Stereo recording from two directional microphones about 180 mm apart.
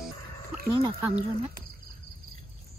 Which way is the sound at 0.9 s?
10° right (ahead or behind).